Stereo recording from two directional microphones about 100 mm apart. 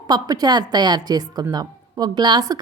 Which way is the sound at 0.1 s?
40° right (ahead or behind).